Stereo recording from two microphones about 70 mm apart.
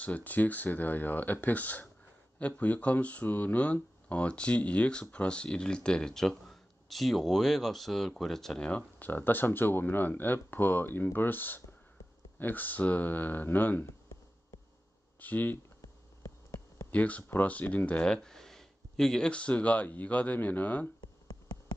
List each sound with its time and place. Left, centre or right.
0.0 s speech: left; by 8.6 s centre
8.6 s speech: left
15.1 s speech: left
16.2 s insect: left
16.9 s speech: left
21.0 s a sound: left